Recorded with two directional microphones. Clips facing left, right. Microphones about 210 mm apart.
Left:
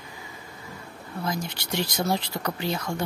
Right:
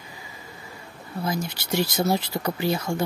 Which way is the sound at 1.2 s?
10° right (ahead or behind).